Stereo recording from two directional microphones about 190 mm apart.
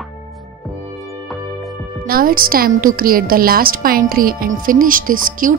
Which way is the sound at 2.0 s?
50° right (ahead or behind).